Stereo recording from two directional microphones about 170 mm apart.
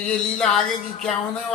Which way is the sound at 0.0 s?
5° left (ahead or behind).